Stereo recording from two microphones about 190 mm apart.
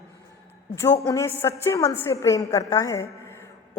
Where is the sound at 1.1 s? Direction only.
15° left (ahead or behind).